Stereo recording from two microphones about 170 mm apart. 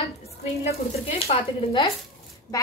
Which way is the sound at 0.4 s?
40° left (ahead or behind).